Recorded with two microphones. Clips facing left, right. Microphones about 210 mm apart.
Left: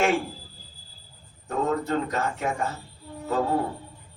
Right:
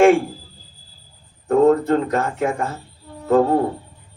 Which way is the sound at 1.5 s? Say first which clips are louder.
Right 13 dB; 50° right (ahead or behind).